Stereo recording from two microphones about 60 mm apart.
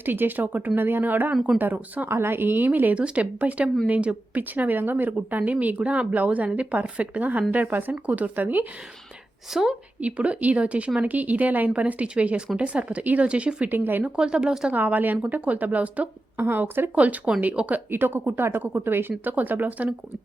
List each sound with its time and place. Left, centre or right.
0.0 s a woman's voice: right
2.0 s a woman's voice: right
2.9 s a woman's voice: right
9.5 s a woman's voice: centre
10.0 s speech: centre
13.7 s a woman's voice: right
14.0 s speech: centre
14.7 s speech: right
16.4 s a woman's voice: right
16.9 s speech: right
17.9 s a woman's voice: right